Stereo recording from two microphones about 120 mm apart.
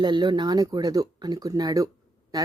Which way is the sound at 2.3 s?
30° right (ahead or behind).